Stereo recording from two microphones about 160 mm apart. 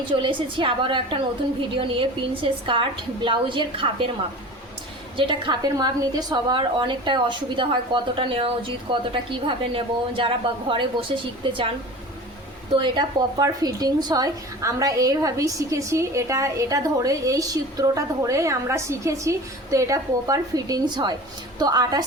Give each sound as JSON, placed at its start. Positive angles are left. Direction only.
{"t": 0.1, "sound": "a woman's voice", "side_deg": -30}
{"t": 5.1, "sound": "a woman's voice", "side_deg": -30}
{"t": 12.8, "sound": "a woman's voice", "side_deg": -30}